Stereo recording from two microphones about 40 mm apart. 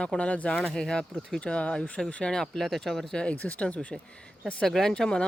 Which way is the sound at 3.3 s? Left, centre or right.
Left.